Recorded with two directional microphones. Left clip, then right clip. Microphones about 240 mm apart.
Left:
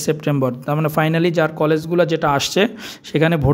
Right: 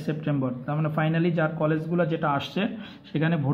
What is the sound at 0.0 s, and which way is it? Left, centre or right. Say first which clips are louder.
Speech: left 10 dB; left.